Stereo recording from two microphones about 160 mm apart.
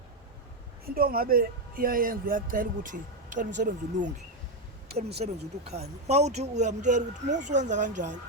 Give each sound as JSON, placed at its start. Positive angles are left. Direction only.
{"t": 0.9, "sound": "a man's voice", "side_deg": -65}
{"t": 5.2, "sound": "speech", "side_deg": -50}